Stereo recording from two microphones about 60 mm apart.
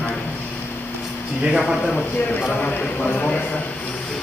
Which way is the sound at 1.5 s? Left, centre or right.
Centre.